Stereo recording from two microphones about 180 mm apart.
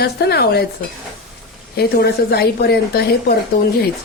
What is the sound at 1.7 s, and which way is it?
Speech, 65° left (ahead or behind).